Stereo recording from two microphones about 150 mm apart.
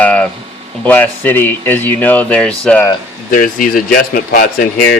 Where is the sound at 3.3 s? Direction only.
65° left (ahead or behind).